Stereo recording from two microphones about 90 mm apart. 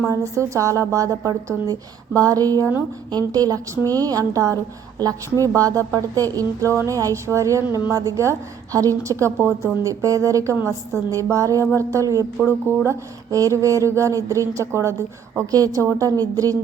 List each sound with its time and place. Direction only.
0.0 s a woman's voice: 35° right (ahead or behind)